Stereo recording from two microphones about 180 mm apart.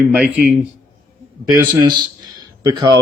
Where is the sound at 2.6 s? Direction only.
20° right (ahead or behind).